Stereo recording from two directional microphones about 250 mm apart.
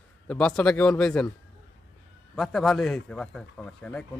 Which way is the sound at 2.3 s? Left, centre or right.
Centre.